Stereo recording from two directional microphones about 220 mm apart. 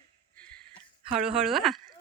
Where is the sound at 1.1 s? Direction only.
Centre (ahead or behind).